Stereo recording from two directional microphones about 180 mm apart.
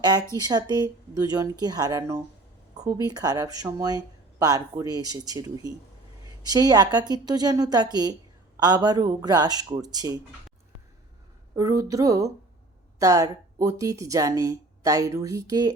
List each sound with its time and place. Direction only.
0.3 s speech: 20° right (ahead or behind)
11.5 s speech: 20° right (ahead or behind)